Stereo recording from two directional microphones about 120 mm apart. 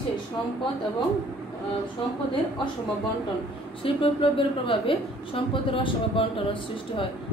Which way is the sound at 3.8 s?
50° left (ahead or behind).